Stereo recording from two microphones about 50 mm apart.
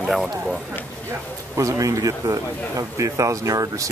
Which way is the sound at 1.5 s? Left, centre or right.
Right.